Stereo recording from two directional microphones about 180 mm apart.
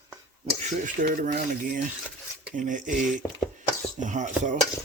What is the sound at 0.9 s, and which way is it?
Speech, 45° right (ahead or behind).